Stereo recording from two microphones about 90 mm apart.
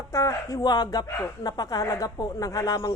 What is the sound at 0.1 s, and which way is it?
A woman's voice, 40° left (ahead or behind).